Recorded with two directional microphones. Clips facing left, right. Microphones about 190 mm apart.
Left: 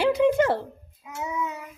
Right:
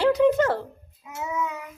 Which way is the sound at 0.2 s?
20° left (ahead or behind).